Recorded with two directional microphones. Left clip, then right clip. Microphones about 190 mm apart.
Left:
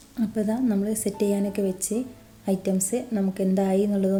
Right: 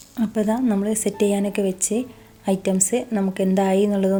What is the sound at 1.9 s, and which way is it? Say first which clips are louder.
Speech: right 4 dB; 60° right (ahead or behind).